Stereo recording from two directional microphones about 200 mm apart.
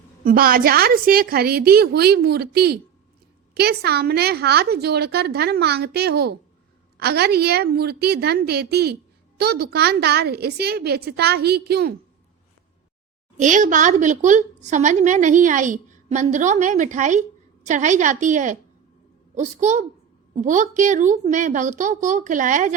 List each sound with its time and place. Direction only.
0.3 s a woman's voice: 45° right (ahead or behind)
13.4 s a woman's voice: 40° right (ahead or behind)